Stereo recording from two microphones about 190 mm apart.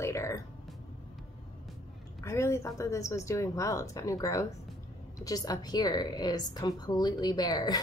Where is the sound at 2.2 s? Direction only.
15° left (ahead or behind).